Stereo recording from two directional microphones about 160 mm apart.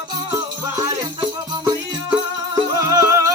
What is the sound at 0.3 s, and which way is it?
Music, 20° right (ahead or behind).